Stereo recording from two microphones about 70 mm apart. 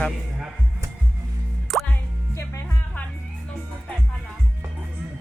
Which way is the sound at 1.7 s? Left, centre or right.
Centre.